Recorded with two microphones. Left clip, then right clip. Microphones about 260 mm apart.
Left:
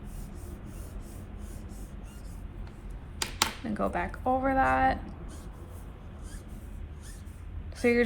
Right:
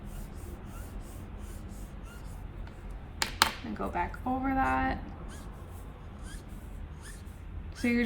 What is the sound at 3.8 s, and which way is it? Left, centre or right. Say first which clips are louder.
A woman's voice: left 5 dB; left.